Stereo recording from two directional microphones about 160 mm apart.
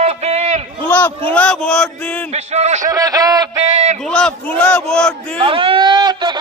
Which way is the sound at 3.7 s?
45° right (ahead or behind).